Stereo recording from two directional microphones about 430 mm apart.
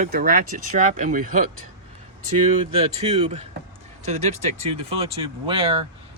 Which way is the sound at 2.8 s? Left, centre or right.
Centre.